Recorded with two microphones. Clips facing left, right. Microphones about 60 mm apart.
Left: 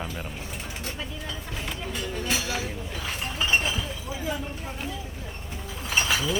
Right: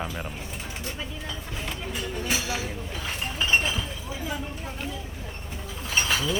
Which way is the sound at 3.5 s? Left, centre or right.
Centre.